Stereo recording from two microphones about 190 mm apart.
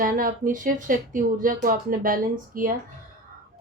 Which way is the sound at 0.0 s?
45° right (ahead or behind).